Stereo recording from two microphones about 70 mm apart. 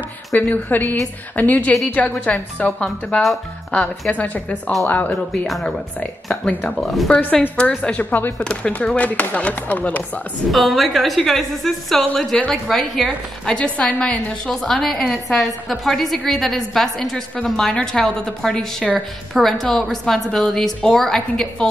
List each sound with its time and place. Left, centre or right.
0.4 s a woman's voice: left
5.5 s a woman's voice: centre
6.8 s a woman's voice: centre
7.8 s speech: left
8.5 s speech: centre
10.5 s a woman's voice: centre
13.6 s a woman's voice: centre
14.5 s a woman's voice: centre